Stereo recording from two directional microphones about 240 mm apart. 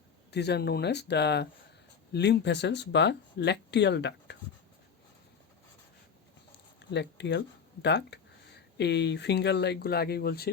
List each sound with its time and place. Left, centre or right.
0.3 s speech: left
6.9 s speech: left